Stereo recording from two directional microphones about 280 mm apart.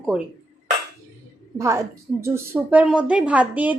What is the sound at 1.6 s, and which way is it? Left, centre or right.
A woman's voice, centre.